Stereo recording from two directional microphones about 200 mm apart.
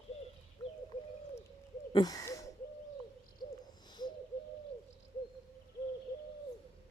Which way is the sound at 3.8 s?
20° left (ahead or behind).